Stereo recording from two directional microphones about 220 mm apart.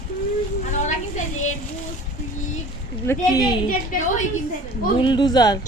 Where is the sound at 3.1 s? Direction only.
15° left (ahead or behind).